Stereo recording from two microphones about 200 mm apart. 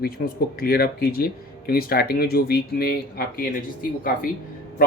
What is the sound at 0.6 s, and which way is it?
Speech, 50° left (ahead or behind).